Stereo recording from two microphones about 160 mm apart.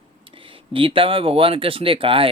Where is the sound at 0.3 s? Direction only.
35° right (ahead or behind).